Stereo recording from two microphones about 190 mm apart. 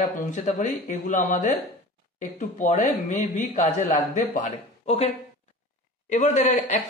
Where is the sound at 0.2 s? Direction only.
40° left (ahead or behind).